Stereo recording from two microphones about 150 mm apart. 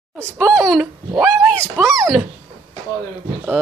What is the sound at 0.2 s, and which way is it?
A child's voice, 5° left (ahead or behind).